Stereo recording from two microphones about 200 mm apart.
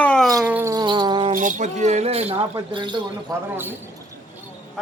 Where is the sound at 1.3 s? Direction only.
40° right (ahead or behind).